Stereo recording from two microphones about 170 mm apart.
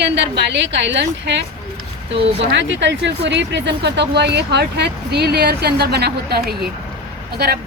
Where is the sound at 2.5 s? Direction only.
90° right; by 6.7 s 65° right (ahead or behind).